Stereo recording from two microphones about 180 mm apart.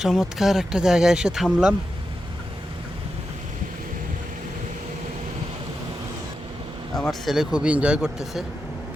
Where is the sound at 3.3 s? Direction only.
40° right (ahead or behind).